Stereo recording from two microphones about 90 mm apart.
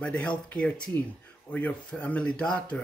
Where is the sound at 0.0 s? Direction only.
15° left (ahead or behind).